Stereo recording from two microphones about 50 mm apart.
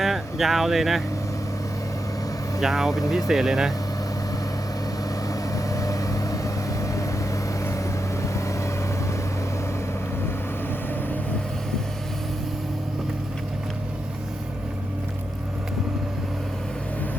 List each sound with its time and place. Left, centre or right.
0.0 s speech: centre
2.6 s speech: centre
5.7 s vehicle: left
8.2 s vehicle: left